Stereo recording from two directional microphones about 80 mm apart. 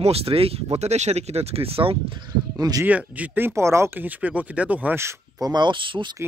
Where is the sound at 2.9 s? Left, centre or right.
Centre; by 3.9 s right.